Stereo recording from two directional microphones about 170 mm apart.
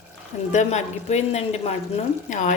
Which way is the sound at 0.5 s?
45° left (ahead or behind).